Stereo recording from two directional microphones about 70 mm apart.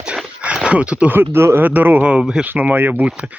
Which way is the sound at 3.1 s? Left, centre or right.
Centre.